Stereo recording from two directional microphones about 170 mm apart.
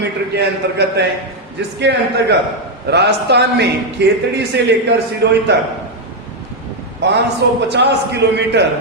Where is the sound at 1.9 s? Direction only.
90° right.